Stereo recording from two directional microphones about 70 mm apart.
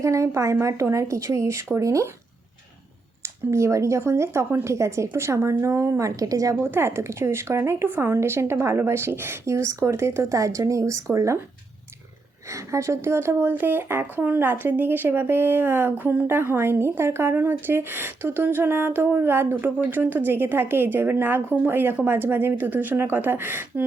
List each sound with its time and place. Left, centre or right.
0.0 s speech: right
3.2 s speech: right
6.6 s speech: right
12.5 s speech: right